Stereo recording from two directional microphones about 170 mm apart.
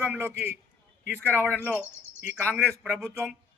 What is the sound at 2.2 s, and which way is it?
Speech, centre (ahead or behind).